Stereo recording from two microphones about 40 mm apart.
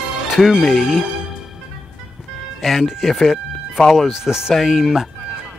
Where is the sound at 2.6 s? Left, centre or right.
Centre.